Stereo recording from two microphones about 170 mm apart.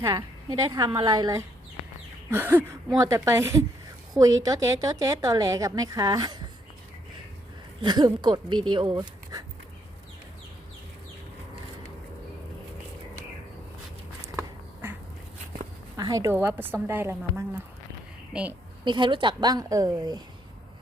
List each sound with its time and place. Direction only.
0.0 s a woman's voice: 25° right (ahead or behind)
7.8 s speech: 25° right (ahead or behind)
14.3 s duck: 15° right (ahead or behind)
16.0 s a woman's voice: 20° right (ahead or behind)
18.9 s a woman's voice: 30° right (ahead or behind)